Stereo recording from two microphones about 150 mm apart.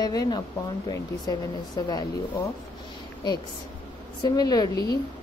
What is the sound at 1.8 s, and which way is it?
Speech, 20° left (ahead or behind).